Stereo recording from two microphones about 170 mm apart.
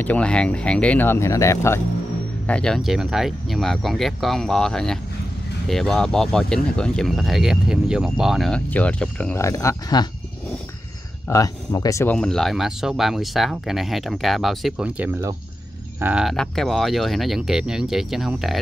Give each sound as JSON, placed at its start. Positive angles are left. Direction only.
{"t": 0.0, "sound": "speech", "side_deg": 5}
{"t": 2.4, "sound": "speech", "side_deg": 5}
{"t": 11.2, "sound": "speech", "side_deg": 20}
{"t": 12.2, "sound": "speech", "side_deg": 5}